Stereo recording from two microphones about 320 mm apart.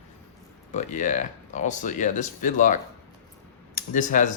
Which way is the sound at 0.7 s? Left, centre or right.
Left.